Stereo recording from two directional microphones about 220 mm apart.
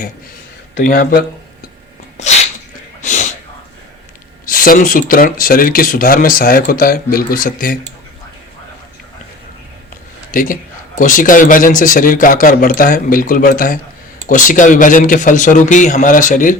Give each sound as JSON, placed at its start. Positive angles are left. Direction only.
{"t": 0.8, "sound": "a man's voice", "side_deg": 40}
{"t": 2.1, "sound": "sneeze", "side_deg": 30}
{"t": 3.0, "sound": "a sound", "side_deg": 35}
{"t": 4.4, "sound": "a man's voice", "side_deg": 40}
{"t": 10.3, "sound": "a man's voice", "side_deg": 40}